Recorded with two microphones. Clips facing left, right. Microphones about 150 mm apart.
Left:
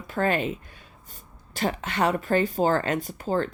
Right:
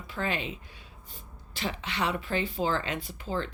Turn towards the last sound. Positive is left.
turn(degrees=45)  # may be behind; listen again after turning